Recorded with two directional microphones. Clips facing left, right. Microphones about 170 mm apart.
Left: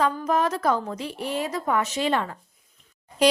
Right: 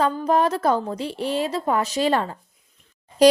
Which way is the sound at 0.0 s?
30° right (ahead or behind).